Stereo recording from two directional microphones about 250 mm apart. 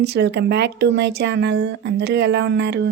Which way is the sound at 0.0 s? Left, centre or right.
Right.